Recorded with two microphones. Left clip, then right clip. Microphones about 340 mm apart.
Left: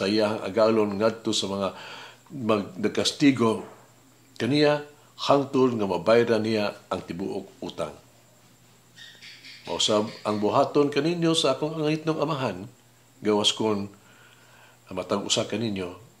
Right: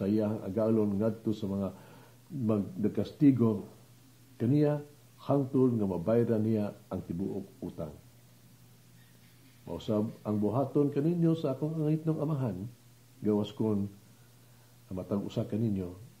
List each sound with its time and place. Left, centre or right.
0.0 s speech: centre
9.7 s speech: centre
14.9 s speech: centre